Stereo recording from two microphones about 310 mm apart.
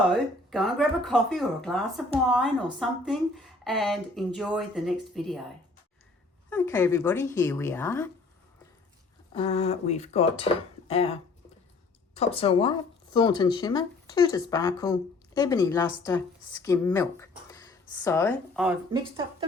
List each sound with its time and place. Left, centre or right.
0.0 s speech: centre
6.5 s speech: centre
9.3 s speech: centre
18.9 s speech: centre